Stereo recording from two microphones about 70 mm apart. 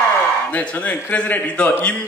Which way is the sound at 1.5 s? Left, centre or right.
Centre.